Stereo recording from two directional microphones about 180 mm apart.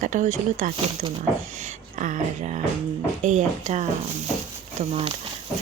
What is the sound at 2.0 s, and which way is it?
Speech, 45° right (ahead or behind).